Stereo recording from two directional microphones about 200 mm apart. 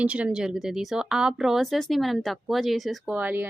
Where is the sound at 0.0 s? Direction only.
5° right (ahead or behind).